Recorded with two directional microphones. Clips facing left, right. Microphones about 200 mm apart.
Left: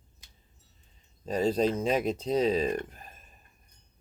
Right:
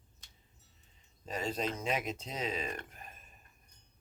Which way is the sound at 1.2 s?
35° left (ahead or behind).